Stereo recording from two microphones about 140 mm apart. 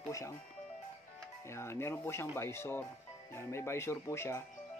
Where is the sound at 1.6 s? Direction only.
20° left (ahead or behind).